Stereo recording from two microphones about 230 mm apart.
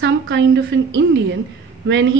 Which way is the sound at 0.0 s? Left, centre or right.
Right.